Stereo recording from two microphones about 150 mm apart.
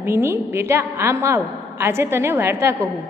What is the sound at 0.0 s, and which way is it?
A woman's voice, 15° right (ahead or behind).